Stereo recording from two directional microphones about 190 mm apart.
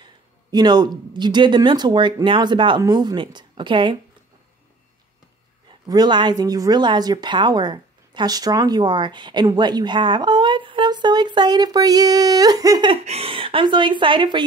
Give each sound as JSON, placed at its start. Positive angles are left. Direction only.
{"t": 0.0, "sound": "speech", "side_deg": -20}
{"t": 5.7, "sound": "speech", "side_deg": -20}